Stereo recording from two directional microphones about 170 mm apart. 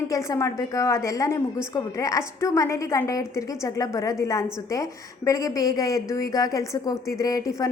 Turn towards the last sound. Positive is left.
turn(degrees=20)  # may be behind; listen again after turning